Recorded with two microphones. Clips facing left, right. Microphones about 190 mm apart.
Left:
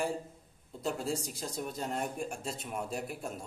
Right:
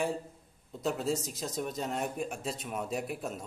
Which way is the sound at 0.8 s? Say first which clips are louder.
Right 3 dB; 5° right (ahead or behind).